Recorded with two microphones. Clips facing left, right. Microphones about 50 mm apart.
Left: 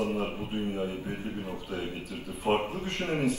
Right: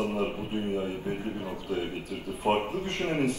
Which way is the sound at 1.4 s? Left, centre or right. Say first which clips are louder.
Right 3 dB; right.